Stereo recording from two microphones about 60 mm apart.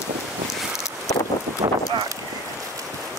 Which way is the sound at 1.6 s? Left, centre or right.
Right.